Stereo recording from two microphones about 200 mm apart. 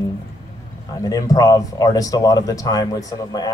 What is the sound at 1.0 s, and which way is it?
Speech, 15° left (ahead or behind).